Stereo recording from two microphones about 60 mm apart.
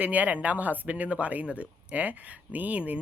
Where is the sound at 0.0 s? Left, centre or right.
Right.